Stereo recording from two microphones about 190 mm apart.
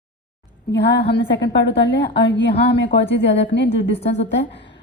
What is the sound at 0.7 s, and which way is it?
A woman's voice, 65° left (ahead or behind).